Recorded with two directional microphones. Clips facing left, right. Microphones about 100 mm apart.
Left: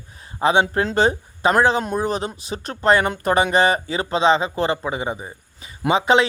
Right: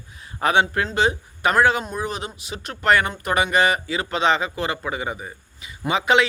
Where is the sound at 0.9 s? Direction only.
40° left (ahead or behind).